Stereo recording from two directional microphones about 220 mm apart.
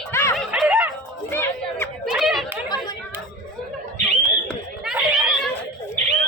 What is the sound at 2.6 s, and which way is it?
Chatter, 20° left (ahead or behind).